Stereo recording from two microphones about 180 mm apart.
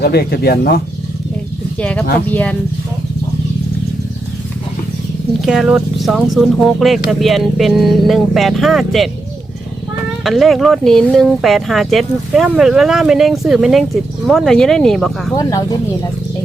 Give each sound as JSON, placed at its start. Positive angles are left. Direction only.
{"t": 0.0, "sound": "speech", "side_deg": 60}
{"t": 1.8, "sound": "speech", "side_deg": 5}
{"t": 5.4, "sound": "speech", "side_deg": -5}
{"t": 10.2, "sound": "speech", "side_deg": 0}
{"t": 15.4, "sound": "speech", "side_deg": 20}